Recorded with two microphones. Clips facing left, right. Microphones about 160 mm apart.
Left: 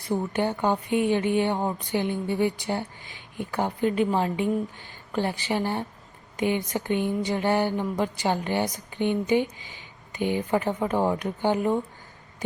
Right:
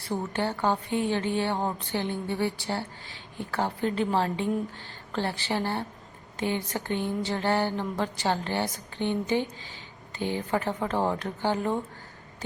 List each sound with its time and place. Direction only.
0.1 s a woman's voice: 15° left (ahead or behind)